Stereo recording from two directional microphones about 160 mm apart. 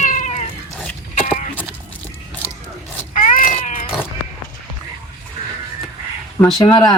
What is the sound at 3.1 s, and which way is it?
Cat, 55° left (ahead or behind).